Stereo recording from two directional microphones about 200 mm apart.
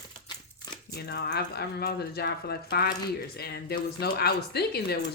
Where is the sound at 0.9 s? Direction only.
55° left (ahead or behind).